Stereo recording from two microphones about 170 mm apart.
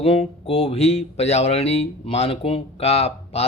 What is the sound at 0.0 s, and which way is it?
Speech, 35° left (ahead or behind).